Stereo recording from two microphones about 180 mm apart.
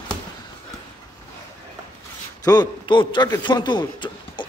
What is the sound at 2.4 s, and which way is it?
A man's voice, 25° left (ahead or behind).